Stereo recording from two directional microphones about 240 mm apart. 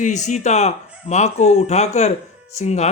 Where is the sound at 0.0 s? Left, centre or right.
Left.